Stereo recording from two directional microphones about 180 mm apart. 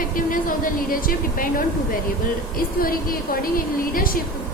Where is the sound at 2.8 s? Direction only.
55° left (ahead or behind).